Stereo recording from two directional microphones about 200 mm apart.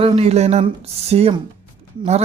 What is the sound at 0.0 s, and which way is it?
Speech, 30° right (ahead or behind).